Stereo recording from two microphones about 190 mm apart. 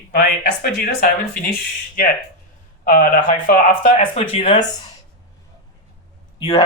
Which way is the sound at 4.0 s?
30° left (ahead or behind).